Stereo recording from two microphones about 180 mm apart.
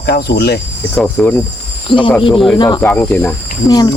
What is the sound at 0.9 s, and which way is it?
Speech, 10° left (ahead or behind).